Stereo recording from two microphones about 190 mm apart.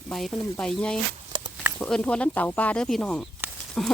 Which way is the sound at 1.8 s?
5° left (ahead or behind).